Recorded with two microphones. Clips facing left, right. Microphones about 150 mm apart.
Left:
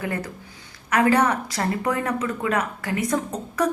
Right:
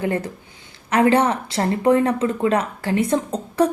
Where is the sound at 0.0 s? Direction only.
30° right (ahead or behind).